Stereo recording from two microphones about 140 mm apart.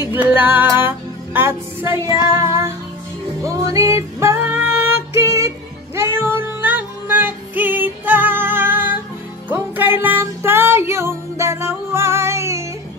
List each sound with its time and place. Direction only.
0.0 s music: 15° right (ahead or behind)